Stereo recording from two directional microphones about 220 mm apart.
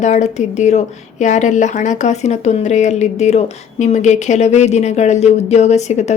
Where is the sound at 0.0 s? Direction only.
30° left (ahead or behind).